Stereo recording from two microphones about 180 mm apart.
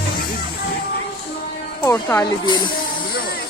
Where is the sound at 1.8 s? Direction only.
15° left (ahead or behind).